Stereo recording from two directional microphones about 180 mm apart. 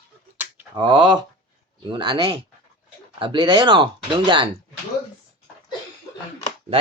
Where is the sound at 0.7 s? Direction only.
25° right (ahead or behind).